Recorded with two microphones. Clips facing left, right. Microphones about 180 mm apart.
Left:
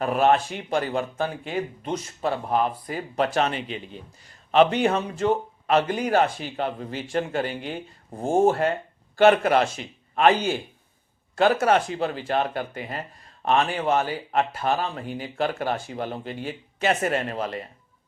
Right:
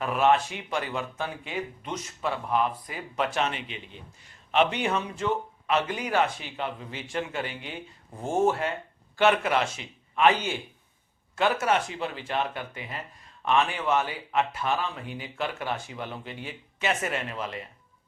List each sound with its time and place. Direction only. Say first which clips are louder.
0.0 s speech: left 3 dB; 40° left (ahead or behind)